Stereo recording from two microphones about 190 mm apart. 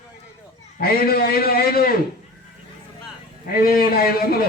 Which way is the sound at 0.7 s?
50° left (ahead or behind).